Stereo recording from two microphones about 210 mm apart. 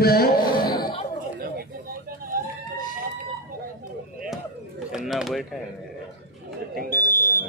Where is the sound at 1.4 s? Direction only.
45° right (ahead or behind).